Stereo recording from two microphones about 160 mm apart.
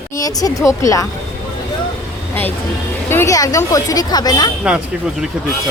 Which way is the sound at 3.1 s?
20° left (ahead or behind).